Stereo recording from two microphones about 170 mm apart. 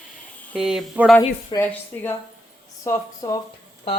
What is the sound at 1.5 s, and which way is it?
Speech, 30° left (ahead or behind).